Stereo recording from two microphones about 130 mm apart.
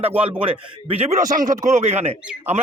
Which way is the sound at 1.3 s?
90° right.